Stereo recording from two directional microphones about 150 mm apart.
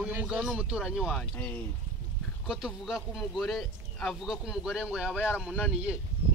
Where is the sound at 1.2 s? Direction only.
5° left (ahead or behind).